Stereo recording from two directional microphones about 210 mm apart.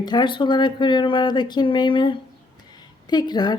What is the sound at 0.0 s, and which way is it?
A woman's voice, 20° left (ahead or behind).